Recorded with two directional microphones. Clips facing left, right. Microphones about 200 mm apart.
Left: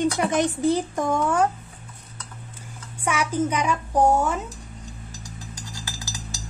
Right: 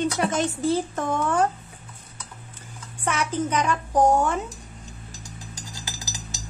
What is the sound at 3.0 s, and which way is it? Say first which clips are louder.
Speech: left 2 dB; 10° left (ahead or behind).